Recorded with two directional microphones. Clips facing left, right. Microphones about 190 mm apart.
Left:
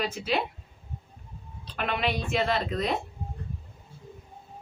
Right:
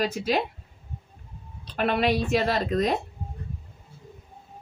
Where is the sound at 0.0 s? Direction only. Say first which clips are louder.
Right 4 dB; 40° right (ahead or behind).